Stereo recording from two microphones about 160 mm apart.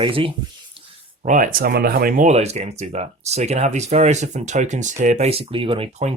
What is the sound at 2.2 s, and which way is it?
Speech, 40° right (ahead or behind).